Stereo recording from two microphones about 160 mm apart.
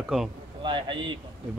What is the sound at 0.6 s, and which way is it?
Speech, 30° right (ahead or behind).